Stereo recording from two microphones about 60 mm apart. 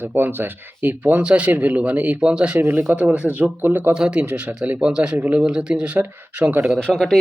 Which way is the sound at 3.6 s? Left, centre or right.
Right.